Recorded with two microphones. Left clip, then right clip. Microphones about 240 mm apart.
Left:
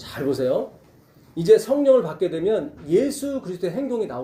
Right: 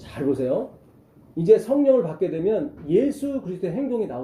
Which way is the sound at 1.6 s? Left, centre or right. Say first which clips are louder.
Left 2 dB; centre.